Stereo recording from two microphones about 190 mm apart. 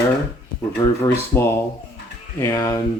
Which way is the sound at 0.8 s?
25° left (ahead or behind).